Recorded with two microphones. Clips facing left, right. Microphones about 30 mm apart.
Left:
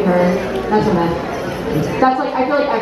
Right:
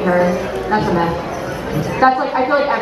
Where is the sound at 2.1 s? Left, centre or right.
Centre.